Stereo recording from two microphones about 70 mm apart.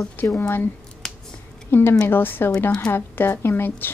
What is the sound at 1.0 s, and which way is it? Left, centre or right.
Finger snapping, centre.